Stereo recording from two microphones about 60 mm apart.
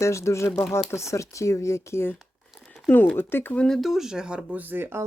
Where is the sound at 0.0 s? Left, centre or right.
Left.